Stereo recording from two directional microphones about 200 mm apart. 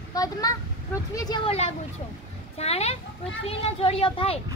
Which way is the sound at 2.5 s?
30° left (ahead or behind).